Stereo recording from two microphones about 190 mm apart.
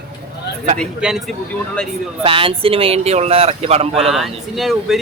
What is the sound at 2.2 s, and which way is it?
Speech, 30° right (ahead or behind).